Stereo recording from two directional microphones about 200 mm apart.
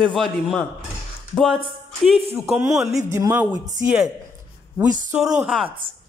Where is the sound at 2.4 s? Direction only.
15° right (ahead or behind).